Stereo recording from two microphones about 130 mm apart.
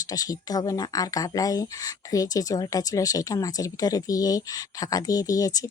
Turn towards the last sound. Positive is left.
turn(degrees=25)  # may be behind; listen again after turning